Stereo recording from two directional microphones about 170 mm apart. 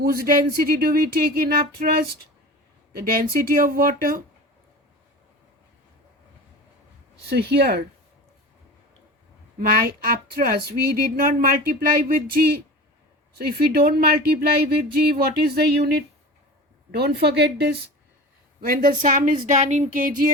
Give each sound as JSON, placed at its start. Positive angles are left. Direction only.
{"t": 0.0, "sound": "speech", "side_deg": -60}
{"t": 7.3, "sound": "speech", "side_deg": -80}
{"t": 9.6, "sound": "speech", "side_deg": -60}
{"t": 18.6, "sound": "speech", "side_deg": -55}